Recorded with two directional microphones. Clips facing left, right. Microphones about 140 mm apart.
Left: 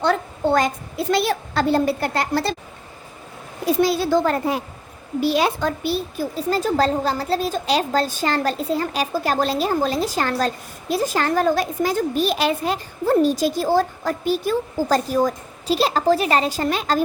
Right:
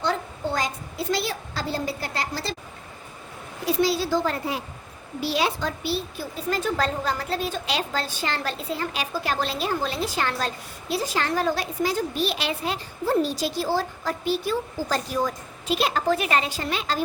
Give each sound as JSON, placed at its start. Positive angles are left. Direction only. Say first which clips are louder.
{"t": 0.0, "sound": "a woman's voice", "louder": "left 6 dB", "side_deg": 60}
{"t": 3.8, "sound": "a woman's voice", "louder": "left 4 dB", "side_deg": 55}
{"t": 6.5, "sound": "a woman's voice", "louder": "left 5 dB", "side_deg": 35}